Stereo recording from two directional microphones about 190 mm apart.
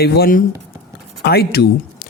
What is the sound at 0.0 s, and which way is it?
Speech, 55° left (ahead or behind).